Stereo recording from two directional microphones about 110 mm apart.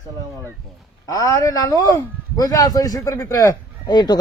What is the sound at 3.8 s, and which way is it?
Speech, 40° left (ahead or behind).